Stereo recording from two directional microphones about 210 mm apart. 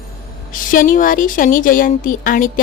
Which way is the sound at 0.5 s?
40° left (ahead or behind).